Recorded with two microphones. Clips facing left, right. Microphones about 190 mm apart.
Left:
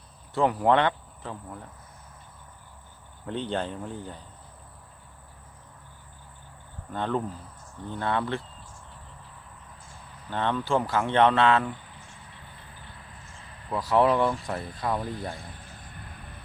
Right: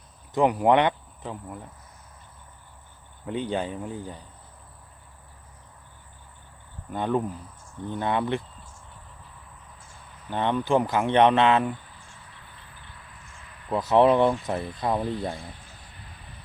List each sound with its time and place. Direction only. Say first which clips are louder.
0.3 s speech: right 2 dB; 15° right (ahead or behind)
3.2 s speech: right 2 dB; 10° right (ahead or behind)
6.9 s speech: right 3 dB; 15° right (ahead or behind)
10.2 s speech: right 3 dB; 15° right (ahead or behind)
13.7 s speech: right 3 dB; 20° right (ahead or behind)
15.8 s vehicle: left 4 dB; 50° left (ahead or behind)